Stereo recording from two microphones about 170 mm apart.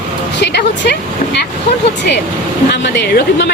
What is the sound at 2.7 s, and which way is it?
Speech, 75° left (ahead or behind).